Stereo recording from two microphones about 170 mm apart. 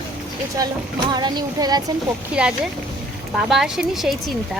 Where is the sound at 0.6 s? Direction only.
25° right (ahead or behind).